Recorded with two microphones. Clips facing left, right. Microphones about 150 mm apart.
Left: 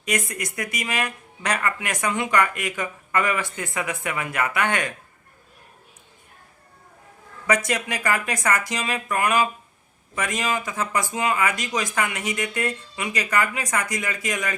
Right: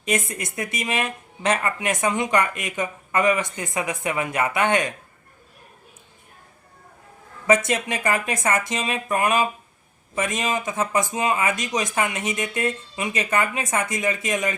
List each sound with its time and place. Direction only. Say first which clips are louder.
0.3 s speech: right 1 dB; 25° right (ahead or behind)
7.4 s speech: right 3 dB; 25° right (ahead or behind)